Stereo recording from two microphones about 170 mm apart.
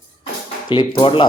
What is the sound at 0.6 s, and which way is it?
Speech, 30° left (ahead or behind).